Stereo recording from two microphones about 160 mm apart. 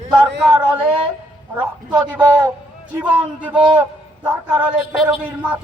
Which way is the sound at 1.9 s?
10° right (ahead or behind).